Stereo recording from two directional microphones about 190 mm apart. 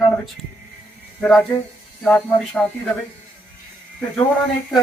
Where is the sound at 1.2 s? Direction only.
5° left (ahead or behind).